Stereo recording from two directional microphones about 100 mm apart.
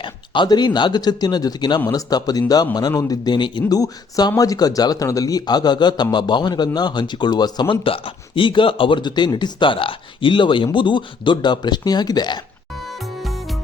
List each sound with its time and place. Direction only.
0.0 s speech: 50° left (ahead or behind)
3.2 s speech: 50° left (ahead or behind)
3.7 s speech: 40° left (ahead or behind)
7.9 s speech: 60° left (ahead or behind); by 12.4 s 45° left (ahead or behind)